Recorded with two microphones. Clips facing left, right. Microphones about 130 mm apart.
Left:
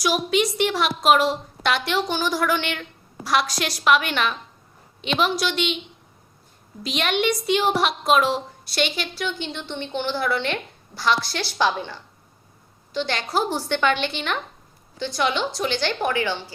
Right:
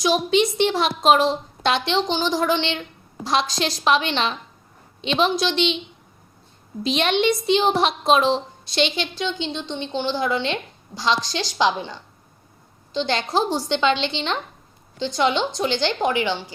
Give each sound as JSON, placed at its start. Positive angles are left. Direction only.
{"t": 0.0, "sound": "a woman's voice", "side_deg": -25}
{"t": 6.8, "sound": "a woman's voice", "side_deg": -30}